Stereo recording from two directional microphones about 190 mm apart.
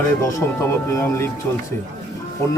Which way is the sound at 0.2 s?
15° left (ahead or behind).